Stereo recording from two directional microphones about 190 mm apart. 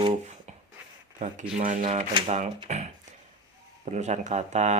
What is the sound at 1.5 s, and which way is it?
Speech, 40° right (ahead or behind).